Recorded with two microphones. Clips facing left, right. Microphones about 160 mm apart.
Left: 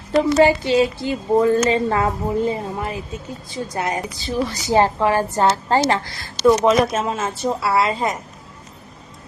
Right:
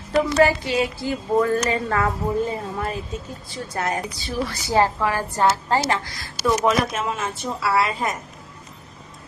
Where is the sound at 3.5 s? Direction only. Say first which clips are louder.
Left 2 dB; 15° left (ahead or behind).